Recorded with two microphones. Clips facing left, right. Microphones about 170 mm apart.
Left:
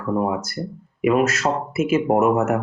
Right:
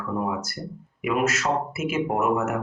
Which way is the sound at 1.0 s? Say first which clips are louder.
Left 5 dB; 35° left (ahead or behind).